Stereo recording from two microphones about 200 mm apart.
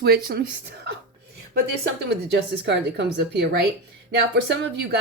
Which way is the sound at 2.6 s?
55° right (ahead or behind).